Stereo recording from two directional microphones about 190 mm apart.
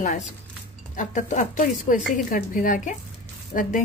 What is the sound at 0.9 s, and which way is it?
A woman's voice, 40° left (ahead or behind).